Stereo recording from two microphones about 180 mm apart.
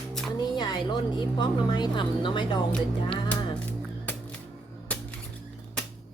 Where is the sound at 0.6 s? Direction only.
25° left (ahead or behind).